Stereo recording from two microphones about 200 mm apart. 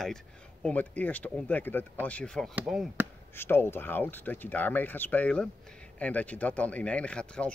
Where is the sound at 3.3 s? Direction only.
10° left (ahead or behind).